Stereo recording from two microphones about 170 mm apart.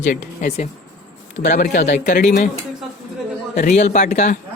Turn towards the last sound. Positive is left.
turn(degrees=45)  # may be behind; listen again after turning